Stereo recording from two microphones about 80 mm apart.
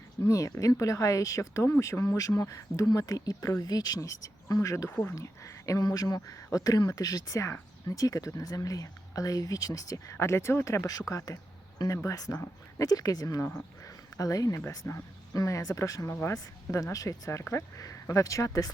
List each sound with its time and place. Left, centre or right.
0.3 s speech: left
4.9 s speech: left
5.1 s speech: left
5.8 s speech: left
12.0 s speech: left
14.8 s speech: left
15.3 s speech: left